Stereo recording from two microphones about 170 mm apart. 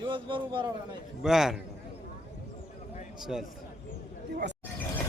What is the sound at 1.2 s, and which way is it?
Speech, 5° right (ahead or behind).